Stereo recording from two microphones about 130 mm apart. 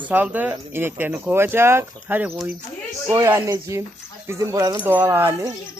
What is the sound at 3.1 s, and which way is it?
Speech, 25° right (ahead or behind).